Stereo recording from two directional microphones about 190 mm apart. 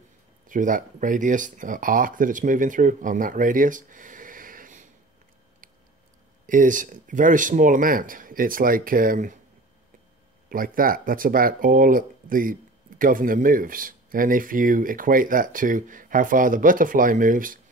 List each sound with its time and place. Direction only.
0.5 s speech: 45° right (ahead or behind)
6.4 s speech: 45° right (ahead or behind)
10.5 s speech: 50° right (ahead or behind)